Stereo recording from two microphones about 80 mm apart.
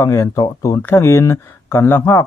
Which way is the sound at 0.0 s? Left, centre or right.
Left.